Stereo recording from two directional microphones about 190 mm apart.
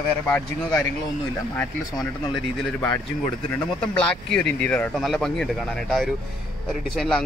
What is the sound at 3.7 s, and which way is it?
Speech, 5° left (ahead or behind).